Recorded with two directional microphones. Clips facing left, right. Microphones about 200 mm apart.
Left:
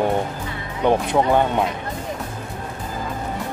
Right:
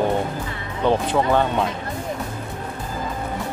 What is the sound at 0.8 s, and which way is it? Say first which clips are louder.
Speech: left 1 dB; 15° left (ahead or behind).